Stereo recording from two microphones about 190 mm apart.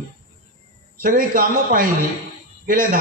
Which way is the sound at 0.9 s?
50° right (ahead or behind).